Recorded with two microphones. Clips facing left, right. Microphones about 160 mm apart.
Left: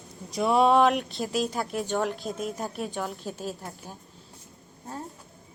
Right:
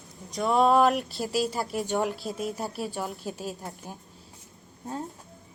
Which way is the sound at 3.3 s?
40° left (ahead or behind).